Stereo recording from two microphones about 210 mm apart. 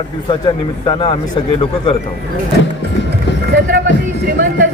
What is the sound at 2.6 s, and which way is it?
Speech, 60° left (ahead or behind).